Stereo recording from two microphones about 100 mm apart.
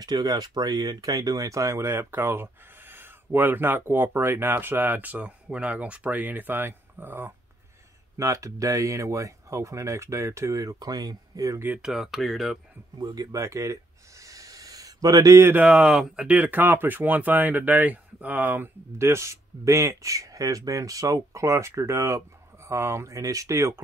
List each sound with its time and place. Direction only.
0.0 s speech: 45° right (ahead or behind); by 7.3 s 20° right (ahead or behind)
8.2 s speech: 35° right (ahead or behind)
11.6 s speech: 15° right (ahead or behind)
11.9 s speech: centre (ahead or behind)
13.0 s a sound: 40° right (ahead or behind)
15.4 s speech: 15° right (ahead or behind)
16.3 s speech: 20° right (ahead or behind); by 23.7 s 35° right (ahead or behind)